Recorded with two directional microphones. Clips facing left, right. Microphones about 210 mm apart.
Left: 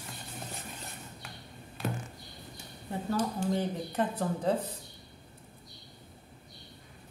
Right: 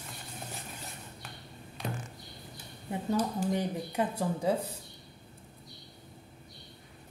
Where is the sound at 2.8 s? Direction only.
15° right (ahead or behind).